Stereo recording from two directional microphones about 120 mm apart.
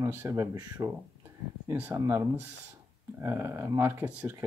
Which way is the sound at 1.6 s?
15° right (ahead or behind).